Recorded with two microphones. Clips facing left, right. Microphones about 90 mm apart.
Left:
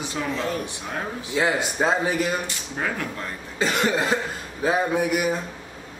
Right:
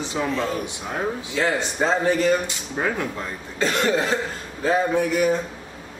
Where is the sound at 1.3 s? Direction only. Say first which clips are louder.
Left 2 dB; 10° left (ahead or behind).